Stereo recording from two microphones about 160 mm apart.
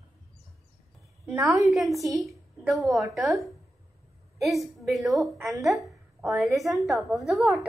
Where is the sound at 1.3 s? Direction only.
20° right (ahead or behind).